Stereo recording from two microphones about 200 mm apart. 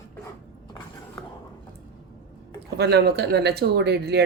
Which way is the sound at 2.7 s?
55° right (ahead or behind).